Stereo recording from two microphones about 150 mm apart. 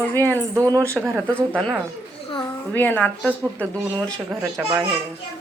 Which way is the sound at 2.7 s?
10° left (ahead or behind).